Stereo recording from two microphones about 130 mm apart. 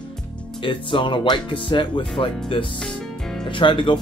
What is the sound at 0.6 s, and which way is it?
Speech, 40° left (ahead or behind).